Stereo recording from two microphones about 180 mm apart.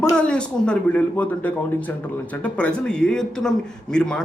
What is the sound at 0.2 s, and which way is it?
A man's voice, 5° left (ahead or behind).